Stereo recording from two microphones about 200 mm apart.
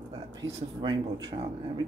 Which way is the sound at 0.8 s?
20° right (ahead or behind).